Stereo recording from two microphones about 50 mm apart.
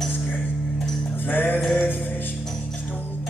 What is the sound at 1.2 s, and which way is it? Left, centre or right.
Music, left.